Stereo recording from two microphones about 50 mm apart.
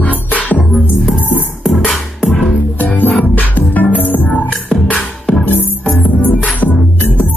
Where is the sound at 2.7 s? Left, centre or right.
Left.